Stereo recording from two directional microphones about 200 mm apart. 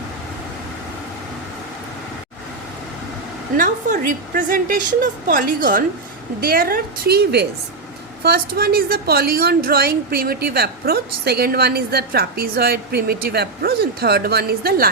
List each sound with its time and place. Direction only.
3.6 s a woman's voice: 40° right (ahead or behind)